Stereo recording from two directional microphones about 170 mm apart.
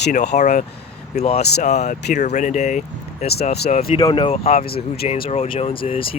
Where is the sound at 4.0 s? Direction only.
25° left (ahead or behind).